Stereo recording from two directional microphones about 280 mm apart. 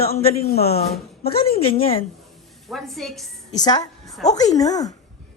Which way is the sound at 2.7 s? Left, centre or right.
Centre.